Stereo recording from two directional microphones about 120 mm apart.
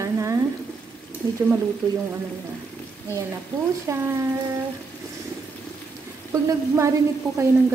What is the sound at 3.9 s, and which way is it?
Speech, 25° right (ahead or behind).